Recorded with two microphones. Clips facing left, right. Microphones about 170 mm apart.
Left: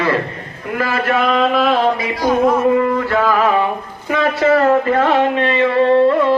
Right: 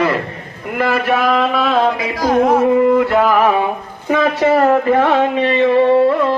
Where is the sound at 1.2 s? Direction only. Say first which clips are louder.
Even; centre (ahead or behind).